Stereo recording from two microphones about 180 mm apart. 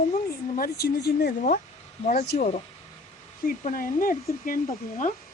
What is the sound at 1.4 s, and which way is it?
Speech, 50° left (ahead or behind).